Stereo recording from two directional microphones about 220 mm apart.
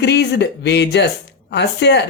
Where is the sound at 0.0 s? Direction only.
50° left (ahead or behind).